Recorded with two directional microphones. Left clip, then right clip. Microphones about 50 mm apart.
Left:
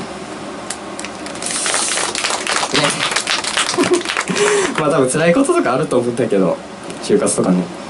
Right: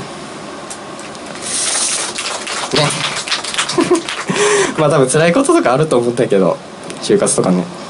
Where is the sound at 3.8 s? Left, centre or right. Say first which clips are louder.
Right 4 dB; centre.